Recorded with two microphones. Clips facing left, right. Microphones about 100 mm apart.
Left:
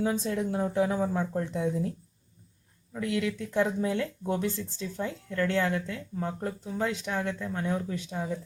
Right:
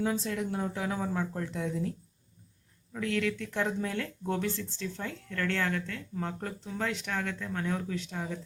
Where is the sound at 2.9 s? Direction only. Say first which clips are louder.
Left 1 dB; 10° left (ahead or behind).